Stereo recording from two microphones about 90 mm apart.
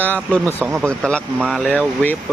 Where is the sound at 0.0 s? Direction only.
20° left (ahead or behind).